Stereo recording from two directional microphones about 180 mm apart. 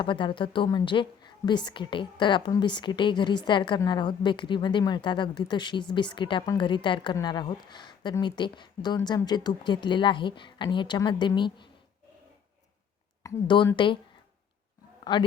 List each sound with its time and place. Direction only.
0.0 s a woman's voice: 30° left (ahead or behind)
13.2 s a woman's voice: 25° left (ahead or behind)
15.1 s a woman's voice: 20° left (ahead or behind)